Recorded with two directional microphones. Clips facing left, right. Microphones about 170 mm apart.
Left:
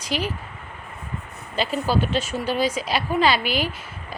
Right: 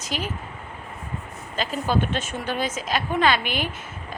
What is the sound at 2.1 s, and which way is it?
Speech, 50° right (ahead or behind).